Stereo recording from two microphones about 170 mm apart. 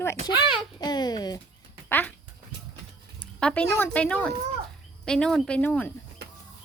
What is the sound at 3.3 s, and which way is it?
Speech, 5° left (ahead or behind).